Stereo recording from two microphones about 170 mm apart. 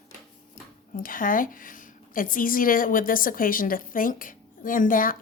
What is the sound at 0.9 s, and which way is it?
A woman's voice, 55° left (ahead or behind).